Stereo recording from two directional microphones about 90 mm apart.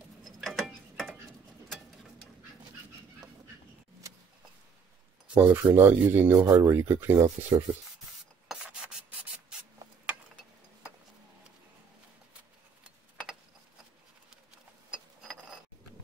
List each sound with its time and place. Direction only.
0.2 s mechanisms: centre (ahead or behind)
5.3 s speech: 20° right (ahead or behind)
6.4 s speech: 35° right (ahead or behind)
7.2 s speech: 40° right (ahead or behind)